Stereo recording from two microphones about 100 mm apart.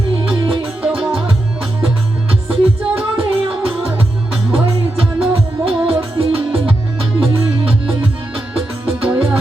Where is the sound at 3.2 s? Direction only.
70° right (ahead or behind).